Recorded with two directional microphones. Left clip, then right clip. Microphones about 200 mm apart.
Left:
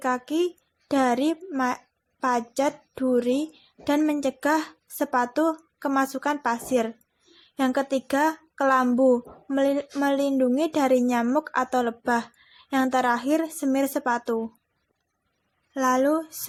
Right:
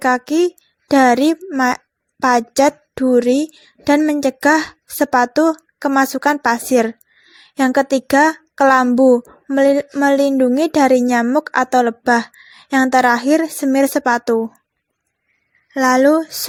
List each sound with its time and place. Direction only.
0.0 s a woman's voice: 35° right (ahead or behind)
15.7 s speech: 35° right (ahead or behind)